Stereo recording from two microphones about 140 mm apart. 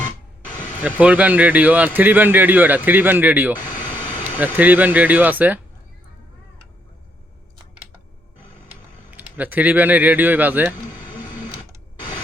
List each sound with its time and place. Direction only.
0.9 s speech: 10° right (ahead or behind)
9.0 s speech: 10° right (ahead or behind)
11.0 s printer: 35° left (ahead or behind)